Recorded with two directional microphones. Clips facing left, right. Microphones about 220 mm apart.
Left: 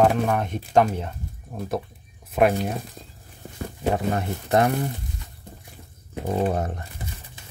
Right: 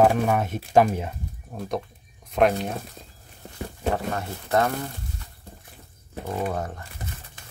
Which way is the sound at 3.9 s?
20° left (ahead or behind).